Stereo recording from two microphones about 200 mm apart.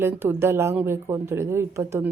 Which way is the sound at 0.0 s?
10° right (ahead or behind).